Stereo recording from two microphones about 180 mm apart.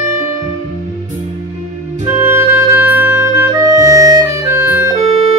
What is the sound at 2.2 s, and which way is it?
Music, 10° right (ahead or behind).